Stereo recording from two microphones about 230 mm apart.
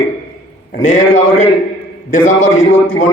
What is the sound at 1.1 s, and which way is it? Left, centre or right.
Speech, left.